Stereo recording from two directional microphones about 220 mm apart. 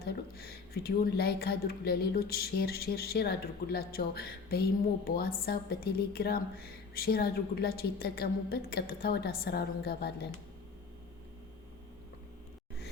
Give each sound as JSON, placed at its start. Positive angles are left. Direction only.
{"t": 0.0, "sound": "a woman's voice", "side_deg": 45}